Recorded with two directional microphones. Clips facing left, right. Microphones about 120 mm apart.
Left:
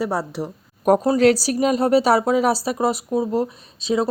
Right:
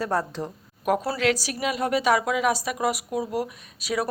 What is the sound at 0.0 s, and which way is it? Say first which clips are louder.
Speech: left 3 dB; 15° left (ahead or behind).